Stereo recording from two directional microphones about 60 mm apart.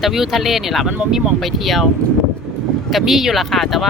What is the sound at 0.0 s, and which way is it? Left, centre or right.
Speech, centre.